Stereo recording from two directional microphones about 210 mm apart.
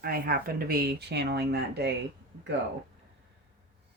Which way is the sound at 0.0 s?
45° right (ahead or behind).